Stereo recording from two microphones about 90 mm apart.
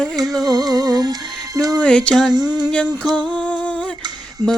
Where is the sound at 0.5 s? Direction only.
45° right (ahead or behind).